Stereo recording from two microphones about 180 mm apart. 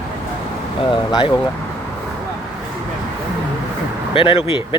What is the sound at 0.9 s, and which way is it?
Speech, 25° left (ahead or behind).